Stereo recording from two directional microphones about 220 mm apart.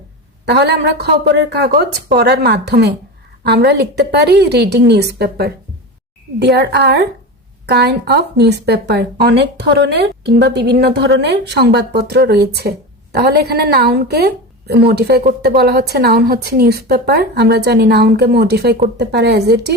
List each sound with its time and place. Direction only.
0.4 s a woman's voice: 50° right (ahead or behind)